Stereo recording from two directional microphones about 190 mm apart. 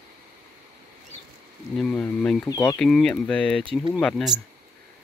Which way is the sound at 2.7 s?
5° left (ahead or behind).